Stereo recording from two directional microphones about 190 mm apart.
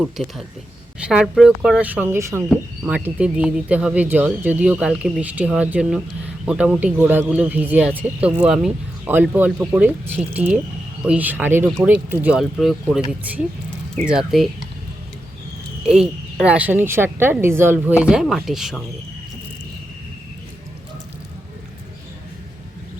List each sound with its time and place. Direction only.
0.2 s speech: centre (ahead or behind)
15.9 s speech: 5° right (ahead or behind)